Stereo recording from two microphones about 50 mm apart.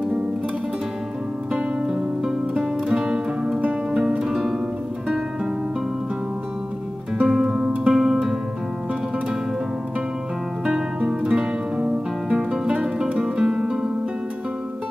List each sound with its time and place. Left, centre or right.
1.5 s music: centre
7.2 s music: centre
11.1 s music: centre
11.8 s music: right
12.4 s music: centre